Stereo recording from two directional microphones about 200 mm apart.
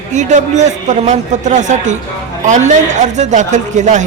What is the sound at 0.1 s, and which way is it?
A man's voice, 35° right (ahead or behind).